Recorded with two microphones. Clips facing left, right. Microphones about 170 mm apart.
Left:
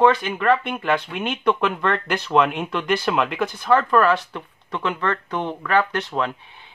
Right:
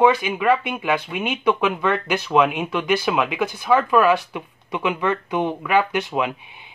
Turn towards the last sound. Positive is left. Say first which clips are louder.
# right 1 dB
turn(degrees=-15)  # may be behind; listen again after turning